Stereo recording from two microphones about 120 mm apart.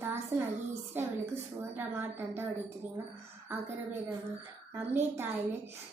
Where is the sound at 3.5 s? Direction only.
15° right (ahead or behind).